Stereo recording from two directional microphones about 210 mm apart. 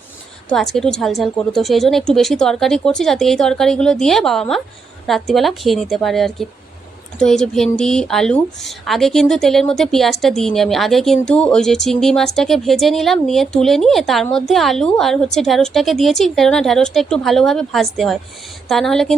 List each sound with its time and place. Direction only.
0.5 s speech: centre (ahead or behind)